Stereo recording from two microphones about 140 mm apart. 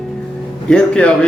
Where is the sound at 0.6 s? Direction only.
5° left (ahead or behind).